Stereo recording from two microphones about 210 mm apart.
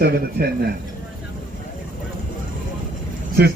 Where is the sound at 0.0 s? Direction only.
45° right (ahead or behind).